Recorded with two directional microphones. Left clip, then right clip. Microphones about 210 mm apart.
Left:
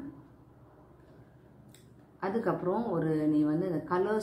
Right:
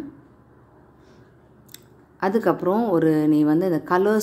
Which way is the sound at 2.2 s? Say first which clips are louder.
Right 10 dB; 50° right (ahead or behind).